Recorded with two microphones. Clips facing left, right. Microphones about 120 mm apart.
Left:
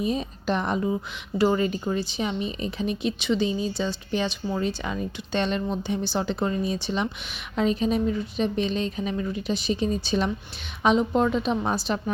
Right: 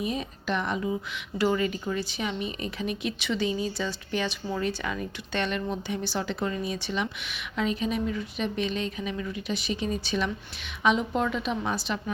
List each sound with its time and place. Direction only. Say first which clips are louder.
0.0 s a woman's voice: left 4 dB; 30° left (ahead or behind)